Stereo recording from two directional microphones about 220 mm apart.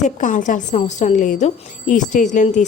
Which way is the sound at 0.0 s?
35° left (ahead or behind).